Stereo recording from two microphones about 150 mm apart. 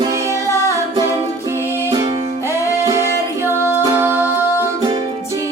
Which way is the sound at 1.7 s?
15° right (ahead or behind).